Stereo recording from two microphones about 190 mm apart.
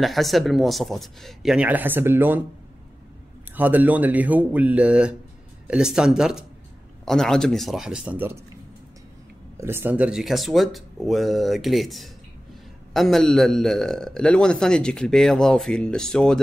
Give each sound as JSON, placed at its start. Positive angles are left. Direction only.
{"t": 0.0, "sound": "a man's voice", "side_deg": 0}
{"t": 3.5, "sound": "a man's voice", "side_deg": -10}
{"t": 9.6, "sound": "a man's voice", "side_deg": -10}